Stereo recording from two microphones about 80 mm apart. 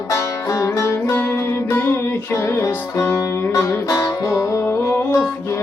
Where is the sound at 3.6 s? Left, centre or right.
Left.